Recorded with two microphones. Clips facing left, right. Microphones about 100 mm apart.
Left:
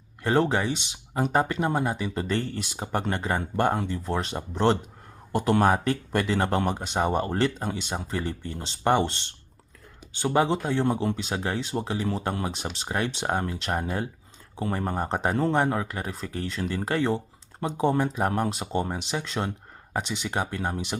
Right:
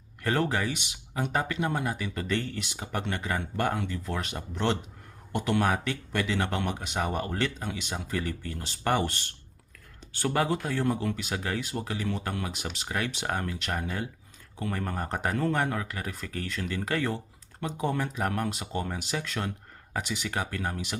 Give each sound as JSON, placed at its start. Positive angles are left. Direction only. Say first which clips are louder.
{"t": 0.2, "sound": "speech", "louder": "left 4 dB", "side_deg": 25}